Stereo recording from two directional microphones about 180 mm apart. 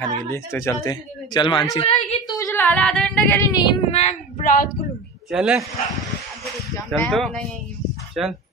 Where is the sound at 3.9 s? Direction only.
35° left (ahead or behind).